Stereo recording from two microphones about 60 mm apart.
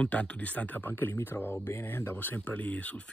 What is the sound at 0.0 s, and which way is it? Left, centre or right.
Speech, left.